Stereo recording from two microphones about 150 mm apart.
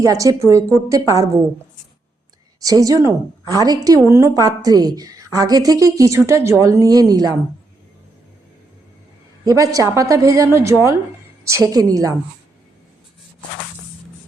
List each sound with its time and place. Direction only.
0.0 s a woman's voice: 20° right (ahead or behind)
2.6 s a woman's voice: 25° right (ahead or behind)
9.4 s a woman's voice: 25° right (ahead or behind)